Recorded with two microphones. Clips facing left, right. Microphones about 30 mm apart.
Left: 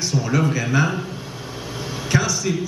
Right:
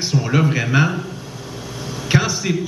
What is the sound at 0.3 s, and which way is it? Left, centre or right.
Speech, right.